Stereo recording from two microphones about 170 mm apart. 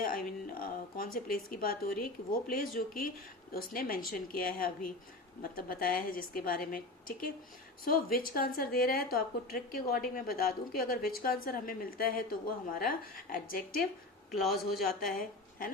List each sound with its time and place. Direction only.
0.0 s a woman's voice: 55° left (ahead or behind)
8.3 s a woman's voice: 60° left (ahead or behind)